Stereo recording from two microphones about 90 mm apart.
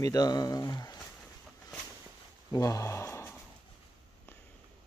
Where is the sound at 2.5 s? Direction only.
40° left (ahead or behind).